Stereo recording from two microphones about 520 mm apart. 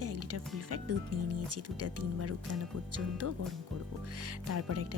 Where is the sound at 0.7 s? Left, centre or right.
Right.